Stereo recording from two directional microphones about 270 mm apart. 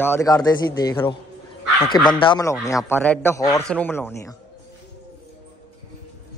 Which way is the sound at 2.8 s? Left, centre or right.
Centre.